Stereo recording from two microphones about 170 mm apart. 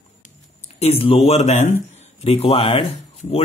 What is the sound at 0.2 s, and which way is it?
Speech, 40° left (ahead or behind).